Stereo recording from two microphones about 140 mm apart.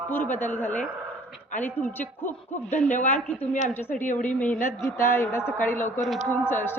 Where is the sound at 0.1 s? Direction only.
15° left (ahead or behind).